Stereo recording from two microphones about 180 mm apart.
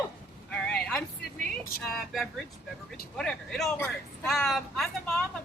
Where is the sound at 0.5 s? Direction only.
5° left (ahead or behind).